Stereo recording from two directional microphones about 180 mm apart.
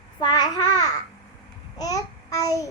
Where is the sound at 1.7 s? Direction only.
20° left (ahead or behind).